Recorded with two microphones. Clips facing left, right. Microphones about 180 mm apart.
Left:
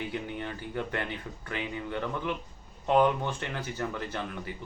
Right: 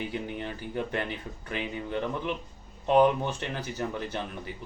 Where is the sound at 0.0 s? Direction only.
15° right (ahead or behind).